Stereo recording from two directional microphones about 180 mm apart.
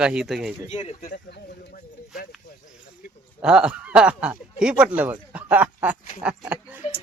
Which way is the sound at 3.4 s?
5° right (ahead or behind).